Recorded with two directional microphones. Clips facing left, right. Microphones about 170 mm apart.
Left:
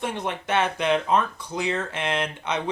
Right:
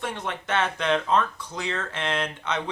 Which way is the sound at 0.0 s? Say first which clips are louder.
Left 3 dB; 15° left (ahead or behind).